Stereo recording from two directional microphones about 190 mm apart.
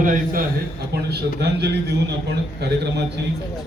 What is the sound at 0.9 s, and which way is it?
A man's voice, 55° right (ahead or behind).